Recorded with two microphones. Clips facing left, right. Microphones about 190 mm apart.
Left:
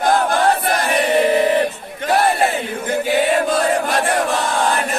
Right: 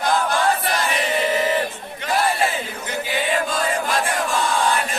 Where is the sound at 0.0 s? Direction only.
50° left (ahead or behind).